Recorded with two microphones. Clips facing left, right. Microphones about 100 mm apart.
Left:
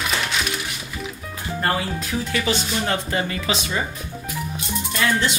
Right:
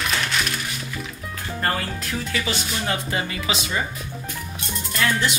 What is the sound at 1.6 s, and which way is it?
Speech, 5° left (ahead or behind).